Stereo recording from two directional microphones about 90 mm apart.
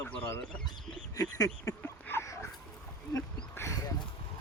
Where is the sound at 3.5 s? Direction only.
35° left (ahead or behind).